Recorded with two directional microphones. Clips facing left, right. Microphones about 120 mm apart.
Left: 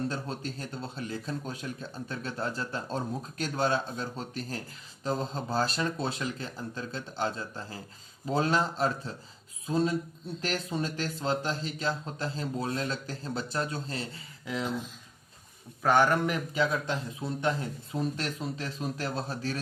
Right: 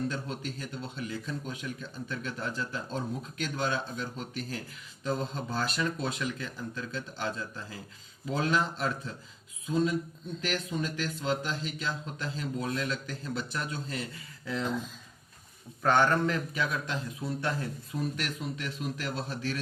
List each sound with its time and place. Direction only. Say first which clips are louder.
0.1 s speech: left 1 dB; 35° left (ahead or behind)
14.4 s speech: even; 10° left (ahead or behind)
15.8 s a man's voice: left 1 dB; 10° left (ahead or behind)
16.8 s speech: left 2 dB; 25° left (ahead or behind)